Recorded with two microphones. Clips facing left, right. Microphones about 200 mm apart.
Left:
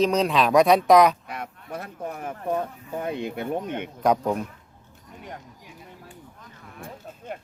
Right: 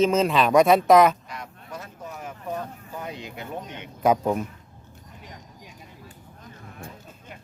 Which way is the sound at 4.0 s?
5° right (ahead or behind).